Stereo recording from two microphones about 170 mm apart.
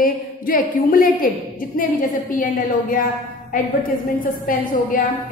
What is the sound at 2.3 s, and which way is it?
Speech, 55° left (ahead or behind).